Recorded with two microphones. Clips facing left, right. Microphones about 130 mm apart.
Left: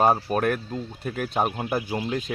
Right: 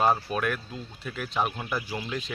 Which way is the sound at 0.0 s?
45° left (ahead or behind).